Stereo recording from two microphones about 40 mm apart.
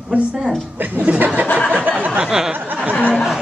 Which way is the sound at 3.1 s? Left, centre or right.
Centre.